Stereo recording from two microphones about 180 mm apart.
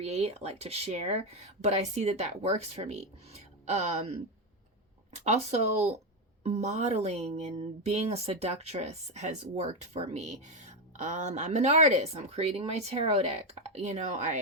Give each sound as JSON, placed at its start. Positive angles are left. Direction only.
{"t": 0.0, "sound": "speech", "side_deg": -35}